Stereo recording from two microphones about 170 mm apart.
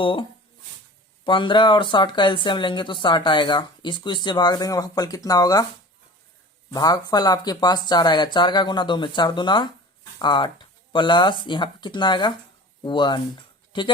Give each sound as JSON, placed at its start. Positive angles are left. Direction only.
{"t": 0.0, "sound": "speech", "side_deg": 30}
{"t": 6.7, "sound": "speech", "side_deg": 25}